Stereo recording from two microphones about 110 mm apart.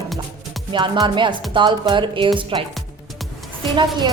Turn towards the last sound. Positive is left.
turn(degrees=-45)  # may be behind; listen again after turning